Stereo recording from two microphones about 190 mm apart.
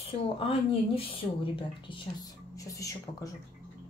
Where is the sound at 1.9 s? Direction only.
20° left (ahead or behind).